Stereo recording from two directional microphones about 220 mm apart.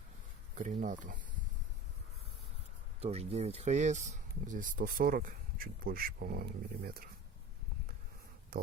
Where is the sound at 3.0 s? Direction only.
30° right (ahead or behind).